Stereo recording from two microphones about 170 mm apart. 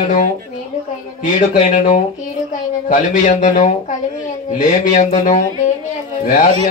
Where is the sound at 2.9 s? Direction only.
50° left (ahead or behind).